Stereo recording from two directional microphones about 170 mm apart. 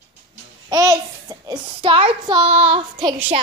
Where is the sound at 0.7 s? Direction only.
20° right (ahead or behind).